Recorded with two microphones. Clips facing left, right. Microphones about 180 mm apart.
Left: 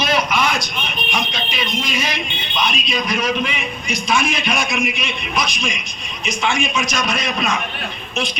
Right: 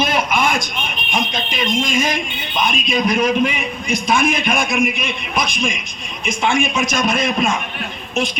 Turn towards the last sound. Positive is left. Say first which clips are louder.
# right 4 dB
turn(degrees=-50)  # may be behind; listen again after turning